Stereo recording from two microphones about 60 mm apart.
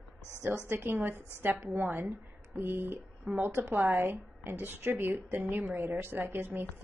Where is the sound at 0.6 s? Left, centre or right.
Right.